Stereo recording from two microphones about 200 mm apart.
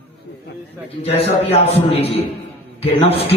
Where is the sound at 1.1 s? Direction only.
30° left (ahead or behind).